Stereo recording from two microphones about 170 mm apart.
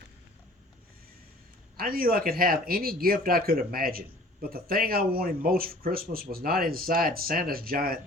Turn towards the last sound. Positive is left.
turn(degrees=-60)  # may be behind; listen again after turning